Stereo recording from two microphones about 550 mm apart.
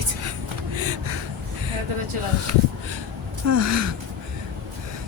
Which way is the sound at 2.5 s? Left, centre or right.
Right.